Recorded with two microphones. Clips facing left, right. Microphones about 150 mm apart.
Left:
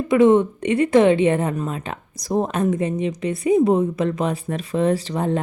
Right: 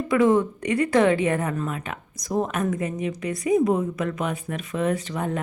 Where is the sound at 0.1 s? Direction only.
25° left (ahead or behind).